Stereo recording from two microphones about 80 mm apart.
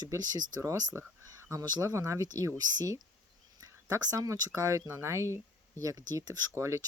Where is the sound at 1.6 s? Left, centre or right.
Right.